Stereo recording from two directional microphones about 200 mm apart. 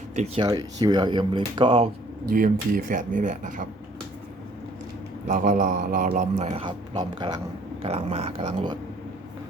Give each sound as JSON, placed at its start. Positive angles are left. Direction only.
{"t": 0.4, "sound": "speech", "side_deg": -20}
{"t": 2.3, "sound": "a man's voice", "side_deg": -45}
{"t": 5.3, "sound": "a man's voice", "side_deg": -45}